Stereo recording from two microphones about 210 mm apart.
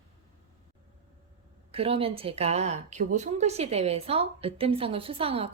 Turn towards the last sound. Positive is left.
turn(degrees=-25)  # may be behind; listen again after turning